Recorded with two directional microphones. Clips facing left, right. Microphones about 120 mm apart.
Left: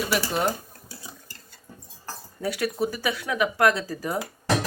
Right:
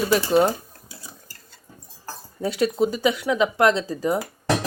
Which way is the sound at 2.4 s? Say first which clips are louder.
Right 5 dB; 25° right (ahead or behind).